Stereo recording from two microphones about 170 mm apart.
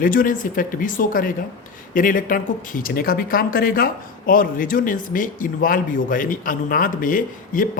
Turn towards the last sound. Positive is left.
turn(degrees=55)  # may be behind; listen again after turning